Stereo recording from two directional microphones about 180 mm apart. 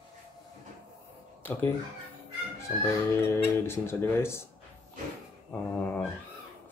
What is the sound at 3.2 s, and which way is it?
Speech, 15° left (ahead or behind).